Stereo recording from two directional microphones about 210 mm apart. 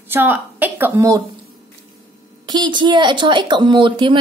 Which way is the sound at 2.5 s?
20° right (ahead or behind).